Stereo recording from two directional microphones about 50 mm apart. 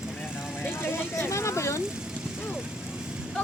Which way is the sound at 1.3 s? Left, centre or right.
Left.